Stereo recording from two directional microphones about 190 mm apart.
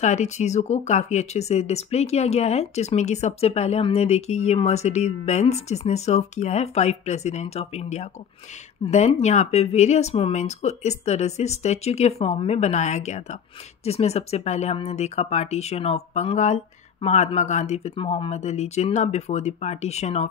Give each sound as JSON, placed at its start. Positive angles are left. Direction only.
{"t": 0.0, "sound": "speech", "side_deg": 40}